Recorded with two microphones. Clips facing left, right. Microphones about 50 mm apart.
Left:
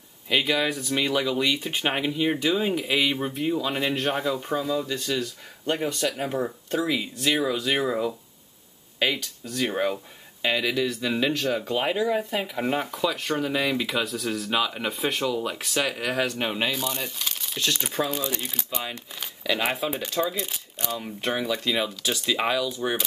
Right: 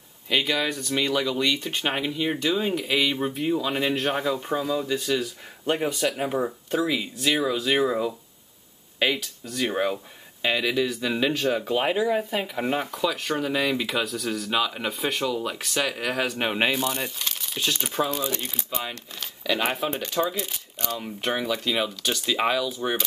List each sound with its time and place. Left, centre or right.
0.3 s speech: centre
16.5 s speech: right
16.8 s speech: centre
19.9 s speech: centre
20.3 s speech: centre